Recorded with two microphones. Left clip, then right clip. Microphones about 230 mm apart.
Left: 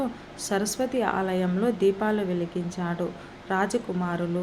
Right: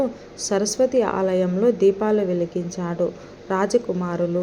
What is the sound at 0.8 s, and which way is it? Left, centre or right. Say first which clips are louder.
Speech: right 9 dB; centre.